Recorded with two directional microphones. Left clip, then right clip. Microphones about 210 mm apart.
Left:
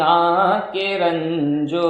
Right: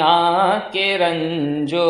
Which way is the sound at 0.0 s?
25° right (ahead or behind).